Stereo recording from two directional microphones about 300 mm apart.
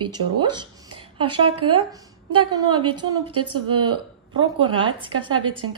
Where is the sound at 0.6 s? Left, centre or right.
Centre.